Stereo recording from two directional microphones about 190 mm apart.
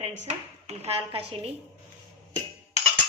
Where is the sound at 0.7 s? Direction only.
35° right (ahead or behind).